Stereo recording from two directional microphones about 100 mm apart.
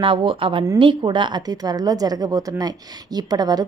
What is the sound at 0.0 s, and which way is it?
Speech, 60° right (ahead or behind).